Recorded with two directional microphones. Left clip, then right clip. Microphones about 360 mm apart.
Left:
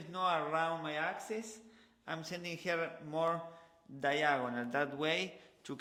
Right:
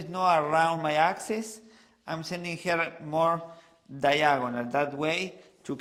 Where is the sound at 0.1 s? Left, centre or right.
Centre.